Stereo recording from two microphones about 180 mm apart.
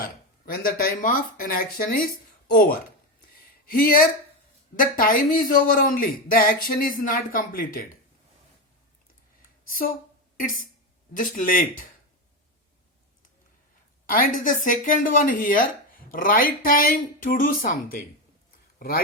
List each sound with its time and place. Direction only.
0.0 s speech: 55° left (ahead or behind)
3.2 s a sound: 55° left (ahead or behind)
4.8 s speech: 50° left (ahead or behind)
9.6 s speech: 50° left (ahead or behind)
11.1 s speech: 50° left (ahead or behind)
14.1 s speech: 50° left (ahead or behind)